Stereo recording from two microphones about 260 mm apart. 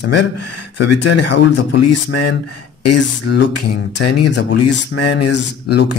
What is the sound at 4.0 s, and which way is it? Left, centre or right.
Speech, left.